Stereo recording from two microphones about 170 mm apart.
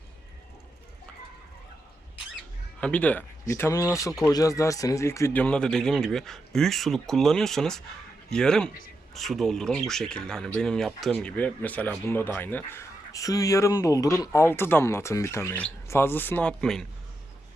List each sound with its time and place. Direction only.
2.8 s speech: 5° left (ahead or behind)